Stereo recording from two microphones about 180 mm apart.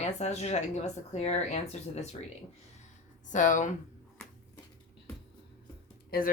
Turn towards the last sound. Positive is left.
turn(degrees=50)  # may be behind; listen again after turning